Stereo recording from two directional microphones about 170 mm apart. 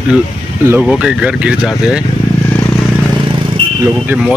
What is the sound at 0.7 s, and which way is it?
Speech, 5° right (ahead or behind).